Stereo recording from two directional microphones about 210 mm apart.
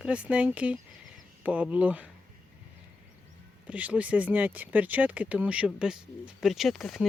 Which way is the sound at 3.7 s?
5° right (ahead or behind).